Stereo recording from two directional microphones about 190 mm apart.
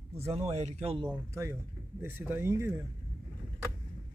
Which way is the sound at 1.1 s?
15° right (ahead or behind).